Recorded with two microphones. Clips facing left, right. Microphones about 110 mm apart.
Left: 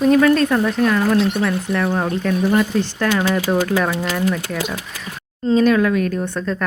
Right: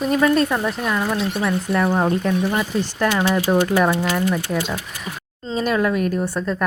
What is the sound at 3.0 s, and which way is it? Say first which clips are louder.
Speech: right 1 dB; 15° right (ahead or behind).